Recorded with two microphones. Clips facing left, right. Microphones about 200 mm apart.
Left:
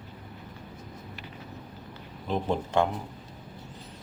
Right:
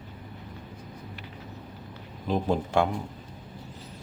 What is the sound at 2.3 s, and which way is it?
Speech, 10° right (ahead or behind).